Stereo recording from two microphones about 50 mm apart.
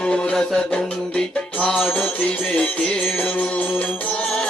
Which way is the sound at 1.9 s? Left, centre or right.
Left.